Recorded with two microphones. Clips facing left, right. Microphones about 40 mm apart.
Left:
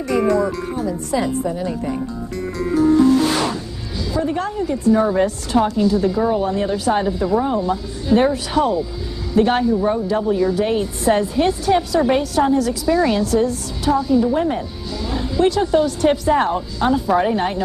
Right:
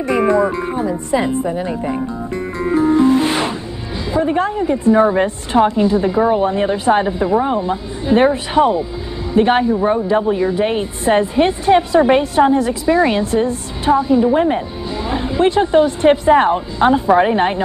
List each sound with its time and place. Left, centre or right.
0.0 s a woman's voice: right